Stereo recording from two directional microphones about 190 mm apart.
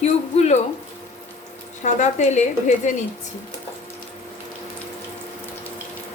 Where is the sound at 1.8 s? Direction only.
40° left (ahead or behind).